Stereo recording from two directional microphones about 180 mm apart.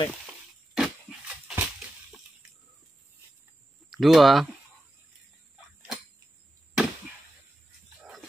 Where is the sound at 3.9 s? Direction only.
Centre (ahead or behind).